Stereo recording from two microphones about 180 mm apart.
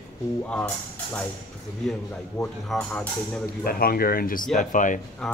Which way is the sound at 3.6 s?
55° left (ahead or behind).